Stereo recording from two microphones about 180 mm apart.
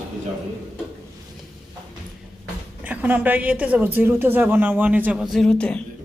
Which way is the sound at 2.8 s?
10° right (ahead or behind).